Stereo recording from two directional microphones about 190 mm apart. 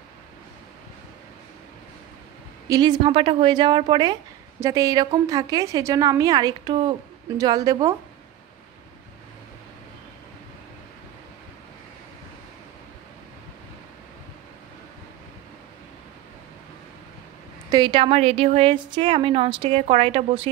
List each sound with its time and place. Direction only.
2.7 s speech: 20° right (ahead or behind)
17.6 s speech: 20° right (ahead or behind)